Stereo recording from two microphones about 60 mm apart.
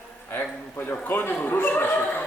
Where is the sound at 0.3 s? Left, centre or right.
Left.